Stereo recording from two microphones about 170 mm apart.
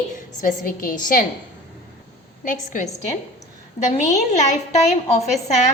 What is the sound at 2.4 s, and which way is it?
A woman's voice, 50° left (ahead or behind).